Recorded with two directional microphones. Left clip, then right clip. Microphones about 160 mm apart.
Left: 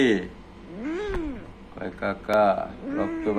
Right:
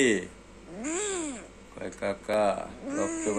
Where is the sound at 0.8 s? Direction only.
45° right (ahead or behind).